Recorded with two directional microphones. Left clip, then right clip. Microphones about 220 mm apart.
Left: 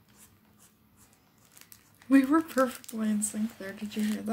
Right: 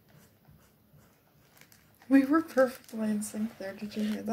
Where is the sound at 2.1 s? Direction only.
15° left (ahead or behind).